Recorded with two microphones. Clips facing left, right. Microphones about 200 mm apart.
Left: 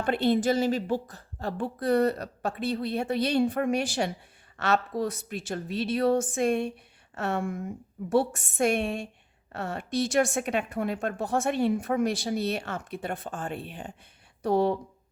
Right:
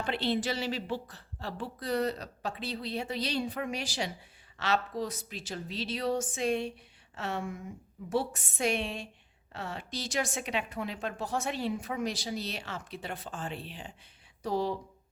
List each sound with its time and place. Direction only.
0.0 s a woman's voice: 50° left (ahead or behind)